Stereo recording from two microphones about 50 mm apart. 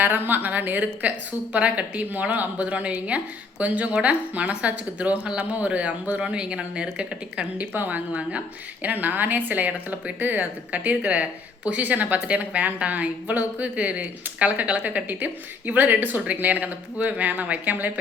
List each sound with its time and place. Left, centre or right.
0.0 s a woman's voice: right
7.7 s a woman's voice: right